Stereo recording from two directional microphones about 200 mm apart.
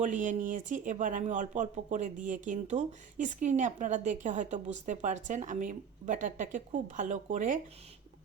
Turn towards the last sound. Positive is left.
turn(degrees=-40)  # may be behind; listen again after turning